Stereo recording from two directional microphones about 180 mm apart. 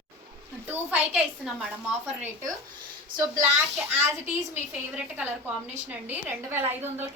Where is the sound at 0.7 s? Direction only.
5° right (ahead or behind).